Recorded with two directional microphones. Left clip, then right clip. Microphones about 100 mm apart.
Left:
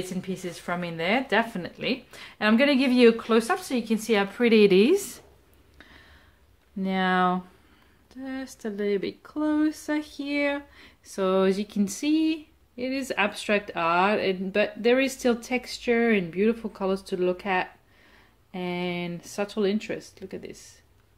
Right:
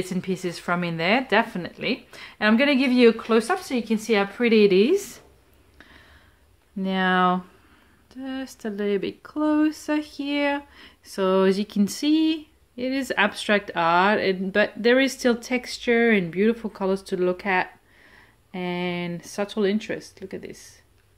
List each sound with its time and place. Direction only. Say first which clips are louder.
0.0 s speech: right 5 dB; 45° right (ahead or behind)
1.2 s speech: right 3 dB; 20° right (ahead or behind)
2.0 s speech: right 3 dB; 10° right (ahead or behind)
4.6 s a woman's voice: right 1 dB; 20° left (ahead or behind)
5.8 s a sound: right 1 dB; centre (ahead or behind)
6.8 s speech: right 3 dB; 15° right (ahead or behind)